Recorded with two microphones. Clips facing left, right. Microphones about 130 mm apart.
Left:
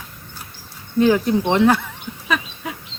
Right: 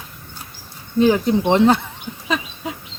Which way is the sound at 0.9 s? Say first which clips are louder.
Even; 20° right (ahead or behind).